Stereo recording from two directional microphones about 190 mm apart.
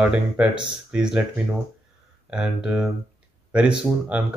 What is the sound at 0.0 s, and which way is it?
Speech, 5° right (ahead or behind).